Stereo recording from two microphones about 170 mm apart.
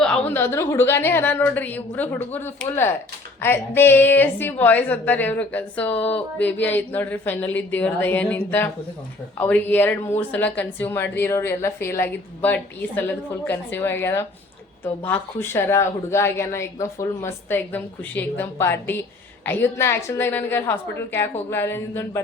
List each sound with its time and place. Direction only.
0.0 s speech: 10° left (ahead or behind)
13.7 s speech: 15° left (ahead or behind)